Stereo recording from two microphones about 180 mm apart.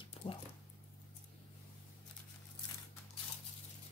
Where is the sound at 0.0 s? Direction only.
30° left (ahead or behind).